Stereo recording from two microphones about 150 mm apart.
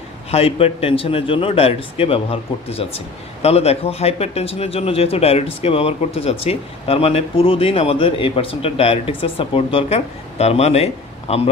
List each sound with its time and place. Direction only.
0.3 s speech: 40° left (ahead or behind)